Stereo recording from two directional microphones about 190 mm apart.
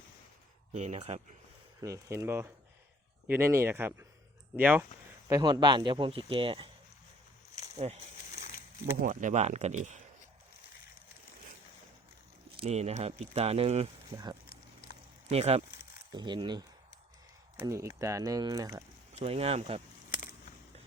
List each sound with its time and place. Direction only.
0.7 s speech: 35° right (ahead or behind)
1.8 s speech: 15° right (ahead or behind)
5.3 s speech: 20° right (ahead or behind)
7.8 s speech: 30° right (ahead or behind)
9.0 s speech: 45° right (ahead or behind)
12.5 s speech: 30° right (ahead or behind)
15.3 s speech: 35° right (ahead or behind); by 18.9 s 15° right (ahead or behind)
19.2 s speech: 30° right (ahead or behind)
20.1 s a sound: 45° left (ahead or behind)